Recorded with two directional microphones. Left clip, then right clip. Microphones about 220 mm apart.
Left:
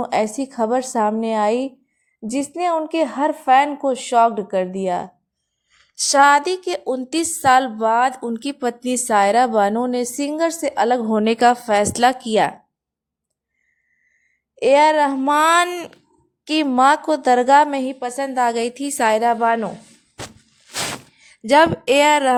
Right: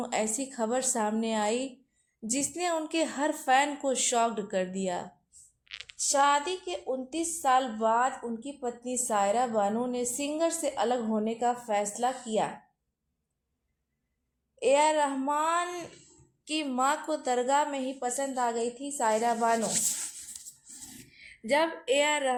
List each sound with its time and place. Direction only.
0.0 s a woman's voice: 35° left (ahead or behind)
14.6 s speech: 40° left (ahead or behind)
21.2 s speech: 40° left (ahead or behind)